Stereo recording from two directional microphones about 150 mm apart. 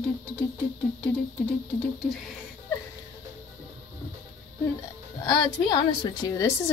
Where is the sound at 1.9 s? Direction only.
Centre (ahead or behind).